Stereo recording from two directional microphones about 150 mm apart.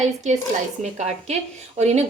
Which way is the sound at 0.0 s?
50° right (ahead or behind).